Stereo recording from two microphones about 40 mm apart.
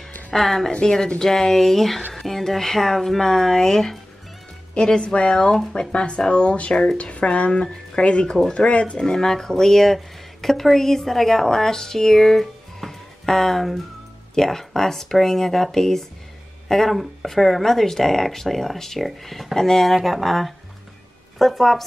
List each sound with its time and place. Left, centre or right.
0.3 s speech: centre
0.7 s speech: centre
4.7 s speech: left
5.3 s speech: centre
8.3 s speech: centre
8.6 s speech: left
8.9 s speech: centre